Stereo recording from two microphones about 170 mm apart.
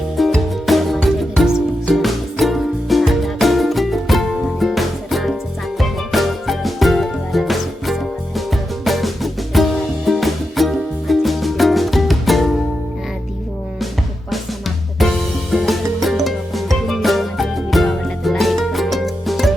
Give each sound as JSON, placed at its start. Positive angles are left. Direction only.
{"t": 0.2, "sound": "music", "side_deg": 0}
{"t": 14.9, "sound": "music", "side_deg": 0}